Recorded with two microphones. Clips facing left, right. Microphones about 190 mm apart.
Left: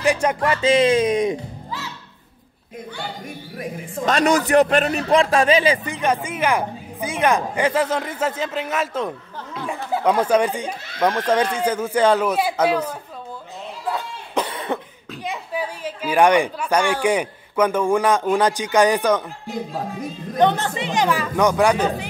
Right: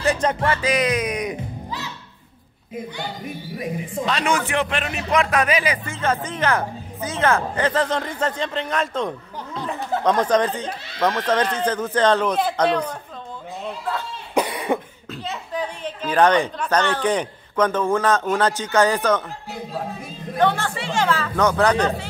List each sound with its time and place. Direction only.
0.0 s music: 10° left (ahead or behind)
0.5 s speech: 25° left (ahead or behind)
4.0 s speech: 45° left (ahead or behind); by 5.9 s 25° left (ahead or behind)
5.9 s speech: 15° left (ahead or behind)
14.3 s cough: 10° right (ahead or behind)
15.2 s a woman's voice: 10° left (ahead or behind)
20.3 s speech: 20° left (ahead or behind)